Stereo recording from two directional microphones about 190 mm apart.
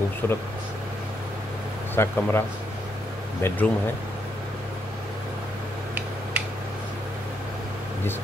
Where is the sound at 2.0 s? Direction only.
10° left (ahead or behind).